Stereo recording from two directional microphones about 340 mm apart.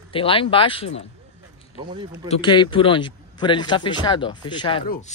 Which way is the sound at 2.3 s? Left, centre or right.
Centre.